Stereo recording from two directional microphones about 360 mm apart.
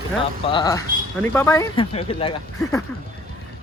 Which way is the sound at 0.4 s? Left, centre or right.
Centre.